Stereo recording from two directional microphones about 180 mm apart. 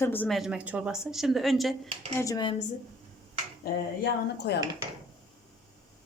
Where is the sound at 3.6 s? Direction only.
70° left (ahead or behind).